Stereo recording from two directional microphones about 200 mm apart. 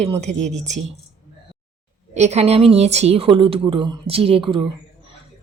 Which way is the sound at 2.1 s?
35° right (ahead or behind).